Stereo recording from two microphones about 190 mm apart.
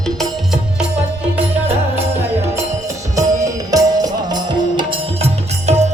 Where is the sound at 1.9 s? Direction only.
10° right (ahead or behind).